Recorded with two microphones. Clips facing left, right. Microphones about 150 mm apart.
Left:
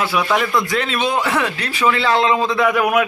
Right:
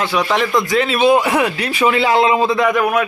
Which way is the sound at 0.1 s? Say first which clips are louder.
Right 2 dB; 5° left (ahead or behind).